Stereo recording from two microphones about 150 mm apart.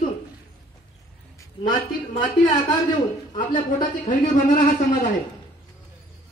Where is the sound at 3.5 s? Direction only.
60° left (ahead or behind).